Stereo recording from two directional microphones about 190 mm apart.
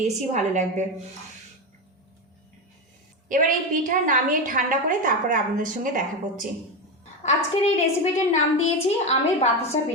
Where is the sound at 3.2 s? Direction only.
45° right (ahead or behind).